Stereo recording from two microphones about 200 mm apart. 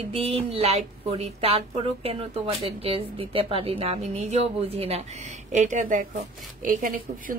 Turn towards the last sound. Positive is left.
turn(degrees=-45)  # may be behind; listen again after turning